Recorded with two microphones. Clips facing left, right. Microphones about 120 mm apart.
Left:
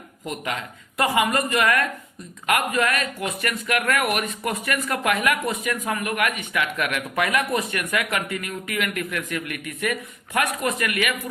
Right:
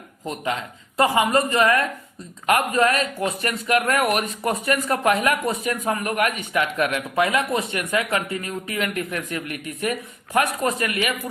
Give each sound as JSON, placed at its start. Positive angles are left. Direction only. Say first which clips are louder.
{"t": 0.3, "sound": "a man's voice", "louder": "right 3 dB", "side_deg": -30}